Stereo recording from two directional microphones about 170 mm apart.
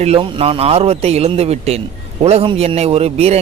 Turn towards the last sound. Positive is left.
turn(degrees=-35)  # may be behind; listen again after turning